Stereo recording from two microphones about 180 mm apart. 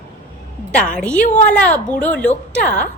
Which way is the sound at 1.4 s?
10° left (ahead or behind).